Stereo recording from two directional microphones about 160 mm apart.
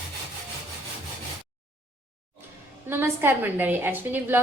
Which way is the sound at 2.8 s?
15° right (ahead or behind).